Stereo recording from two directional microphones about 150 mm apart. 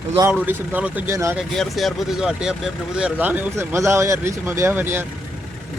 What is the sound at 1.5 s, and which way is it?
Speech, centre (ahead or behind).